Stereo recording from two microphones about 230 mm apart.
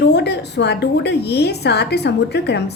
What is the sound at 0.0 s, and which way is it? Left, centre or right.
A woman's voice, left.